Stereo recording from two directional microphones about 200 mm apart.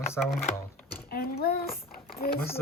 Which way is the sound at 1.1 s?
50° left (ahead or behind).